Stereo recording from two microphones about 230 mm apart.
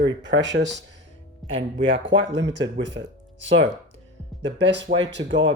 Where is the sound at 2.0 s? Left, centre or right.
Right.